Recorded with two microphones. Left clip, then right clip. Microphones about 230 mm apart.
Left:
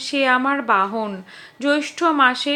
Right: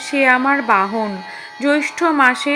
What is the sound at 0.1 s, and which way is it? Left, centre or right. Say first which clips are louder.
A woman's voice: right 4 dB; right.